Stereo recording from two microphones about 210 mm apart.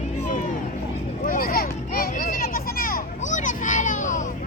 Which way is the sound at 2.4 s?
45° left (ahead or behind).